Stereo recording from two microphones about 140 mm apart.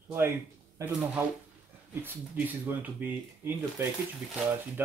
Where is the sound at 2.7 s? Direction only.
15° right (ahead or behind).